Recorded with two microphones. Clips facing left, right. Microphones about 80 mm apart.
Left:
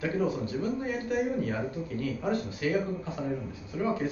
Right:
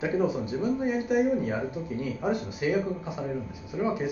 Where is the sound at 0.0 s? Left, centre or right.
Centre.